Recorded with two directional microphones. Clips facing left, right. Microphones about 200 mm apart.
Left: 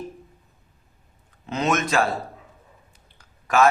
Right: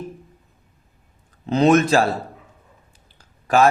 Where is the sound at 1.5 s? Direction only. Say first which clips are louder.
Right 8 dB; 35° right (ahead or behind).